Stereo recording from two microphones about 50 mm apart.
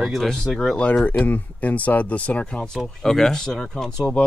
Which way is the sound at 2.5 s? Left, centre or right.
Centre.